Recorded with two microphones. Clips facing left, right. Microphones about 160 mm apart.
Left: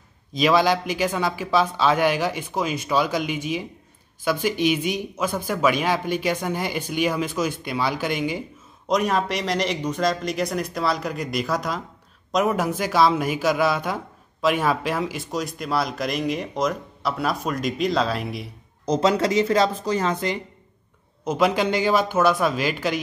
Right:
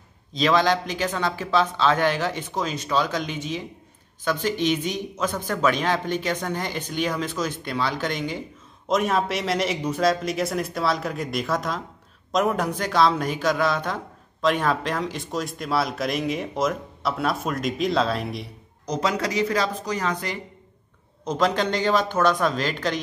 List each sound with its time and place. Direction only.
0.3 s speech: 10° left (ahead or behind)
8.8 s a man's voice: centre (ahead or behind)
18.9 s speech: 30° left (ahead or behind)
21.2 s speech: 10° left (ahead or behind)